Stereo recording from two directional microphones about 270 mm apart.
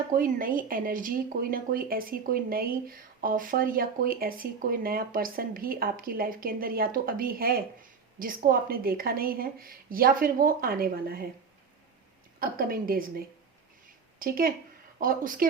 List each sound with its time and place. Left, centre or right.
0.2 s speech: right
12.4 s speech: right